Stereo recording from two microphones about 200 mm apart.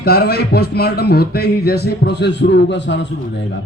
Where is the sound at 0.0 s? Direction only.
50° left (ahead or behind).